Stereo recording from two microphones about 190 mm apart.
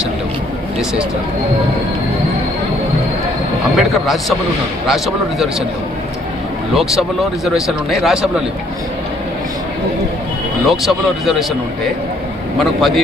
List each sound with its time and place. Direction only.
3.8 s speech: centre (ahead or behind)
6.7 s speech: centre (ahead or behind)
10.7 s speech: centre (ahead or behind)
12.5 s speech: centre (ahead or behind)